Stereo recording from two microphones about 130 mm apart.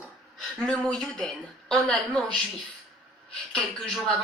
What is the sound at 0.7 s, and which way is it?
Speech, 5° left (ahead or behind).